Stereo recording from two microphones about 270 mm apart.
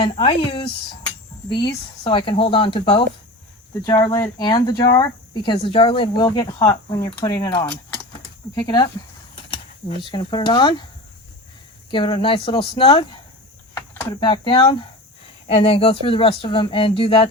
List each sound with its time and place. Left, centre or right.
0.0 s speech: centre
10.0 s speech: centre
11.9 s speech: centre